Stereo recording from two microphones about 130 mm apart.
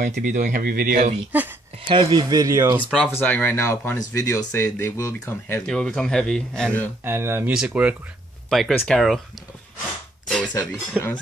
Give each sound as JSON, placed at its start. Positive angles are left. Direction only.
{"t": 0.0, "sound": "speech", "side_deg": -90}
{"t": 1.3, "sound": "speech", "side_deg": -10}
{"t": 1.9, "sound": "speech", "side_deg": -35}
{"t": 3.1, "sound": "speech", "side_deg": 15}
{"t": 5.7, "sound": "speech", "side_deg": 5}
{"t": 7.1, "sound": "speech", "side_deg": -20}
{"t": 10.2, "sound": "speech", "side_deg": 10}